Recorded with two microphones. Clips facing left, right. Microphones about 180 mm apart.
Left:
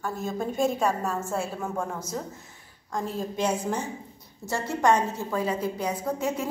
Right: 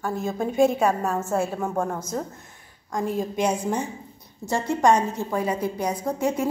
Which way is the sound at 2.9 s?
15° right (ahead or behind).